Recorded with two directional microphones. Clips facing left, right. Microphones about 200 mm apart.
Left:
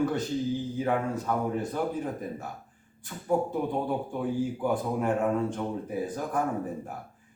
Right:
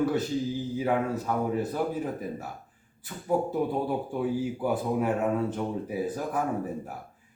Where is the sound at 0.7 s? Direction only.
5° right (ahead or behind).